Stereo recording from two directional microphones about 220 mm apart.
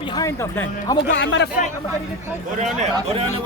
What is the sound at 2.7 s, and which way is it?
Speech, 30° right (ahead or behind).